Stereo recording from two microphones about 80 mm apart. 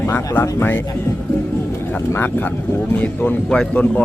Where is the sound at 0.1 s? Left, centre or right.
Left.